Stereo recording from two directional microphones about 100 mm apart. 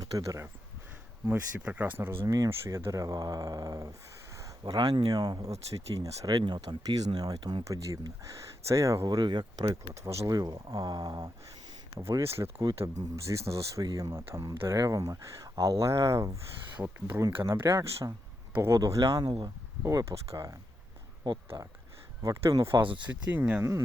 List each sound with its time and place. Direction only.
0.0 s speech: 35° right (ahead or behind)
1.3 s speech: 15° right (ahead or behind)
2.2 s speech: 35° right (ahead or behind)
7.6 s speech: 30° right (ahead or behind)
10.0 s speech: 30° right (ahead or behind)
11.9 s speech: 30° right (ahead or behind)
16.7 s speech: 15° right (ahead or behind)
17.5 s a man's voice: 30° right (ahead or behind)
18.8 s speech: 35° right (ahead or behind)
19.8 s speech: 30° right (ahead or behind)
22.8 s speech: 60° right (ahead or behind)
23.0 s speech: 15° right (ahead or behind)